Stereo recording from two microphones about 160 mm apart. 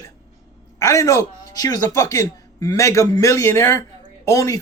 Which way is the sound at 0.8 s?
20° left (ahead or behind).